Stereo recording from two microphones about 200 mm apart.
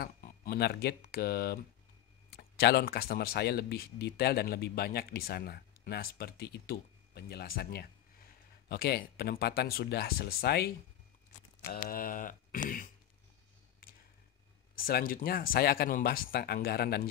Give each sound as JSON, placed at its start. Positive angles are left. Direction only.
{"t": 0.0, "sound": "speech", "side_deg": 50}
{"t": 11.7, "sound": "speech", "side_deg": 45}
{"t": 14.8, "sound": "speech", "side_deg": 45}